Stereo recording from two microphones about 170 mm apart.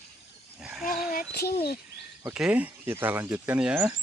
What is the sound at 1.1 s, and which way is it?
Speech, 60° left (ahead or behind).